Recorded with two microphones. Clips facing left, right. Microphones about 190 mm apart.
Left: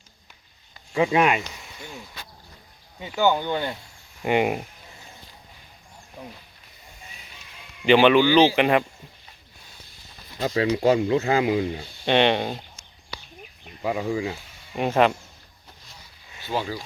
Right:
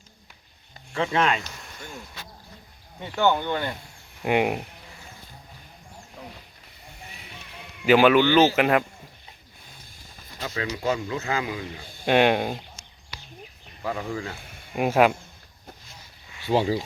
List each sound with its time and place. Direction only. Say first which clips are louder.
0.9 s speech: left 4 dB; 15° left (ahead or behind)
1.5 s a sound: left 1 dB; 5° left (ahead or behind)
3.0 s speech: left 1 dB; 10° left (ahead or behind)
4.2 s speech: left 1 dB; centre (ahead or behind)
7.2 s slosh: right 4 dB; 60° right (ahead or behind)
7.9 s speech: left 1 dB; 5° right (ahead or behind)
10.4 s speech: left 7 dB; 35° left (ahead or behind)
12.0 s speech: even; 5° right (ahead or behind)
13.8 s speech: left 5 dB; 15° left (ahead or behind)
14.4 s a sound: right 2 dB; 55° right (ahead or behind)
14.8 s speech: even; 5° right (ahead or behind)
16.5 s speech: right 6 dB; 25° right (ahead or behind)